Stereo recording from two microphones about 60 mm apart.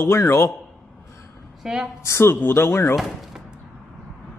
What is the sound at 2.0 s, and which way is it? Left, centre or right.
Speech, left.